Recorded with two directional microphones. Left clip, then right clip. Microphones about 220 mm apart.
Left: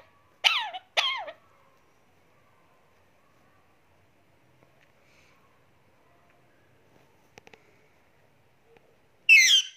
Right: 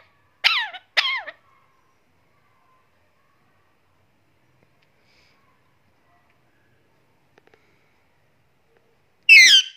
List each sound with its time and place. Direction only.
0.4 s cough: 15° right (ahead or behind)
9.2 s owl: 20° right (ahead or behind)